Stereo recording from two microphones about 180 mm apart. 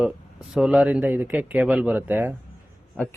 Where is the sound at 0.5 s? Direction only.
5° right (ahead or behind).